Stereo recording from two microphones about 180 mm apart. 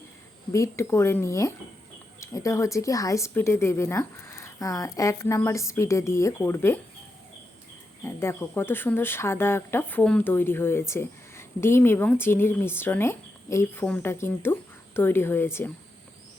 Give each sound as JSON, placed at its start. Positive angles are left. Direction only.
{"t": 0.5, "sound": "speech", "side_deg": 15}
{"t": 8.0, "sound": "speech", "side_deg": 15}